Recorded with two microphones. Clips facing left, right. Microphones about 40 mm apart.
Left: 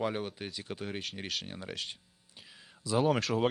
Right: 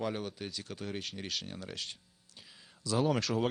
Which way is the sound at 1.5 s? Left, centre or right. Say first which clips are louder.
Left 2 dB; centre.